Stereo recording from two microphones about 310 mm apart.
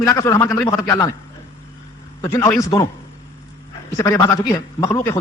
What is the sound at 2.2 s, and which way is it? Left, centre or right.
Speech, centre.